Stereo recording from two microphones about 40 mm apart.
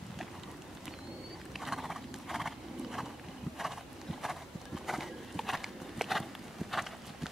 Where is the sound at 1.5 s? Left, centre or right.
Centre.